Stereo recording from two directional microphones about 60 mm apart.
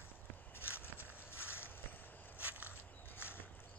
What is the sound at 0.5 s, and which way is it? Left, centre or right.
Walk, left.